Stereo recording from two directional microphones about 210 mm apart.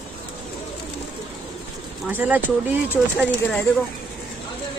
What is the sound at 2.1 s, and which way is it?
Speech, 10° right (ahead or behind).